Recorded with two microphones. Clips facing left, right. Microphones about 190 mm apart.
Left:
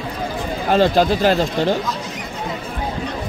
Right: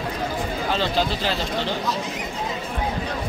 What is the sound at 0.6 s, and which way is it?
Speech, 50° left (ahead or behind).